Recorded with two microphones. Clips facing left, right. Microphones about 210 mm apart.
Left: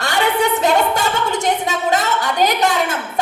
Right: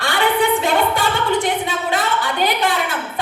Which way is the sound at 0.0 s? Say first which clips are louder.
Even; 45° left (ahead or behind).